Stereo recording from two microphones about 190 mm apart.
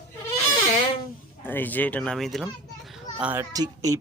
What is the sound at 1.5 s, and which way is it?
Speech, 10° left (ahead or behind).